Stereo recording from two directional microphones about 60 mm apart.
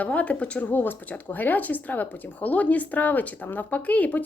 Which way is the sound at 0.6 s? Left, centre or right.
Left.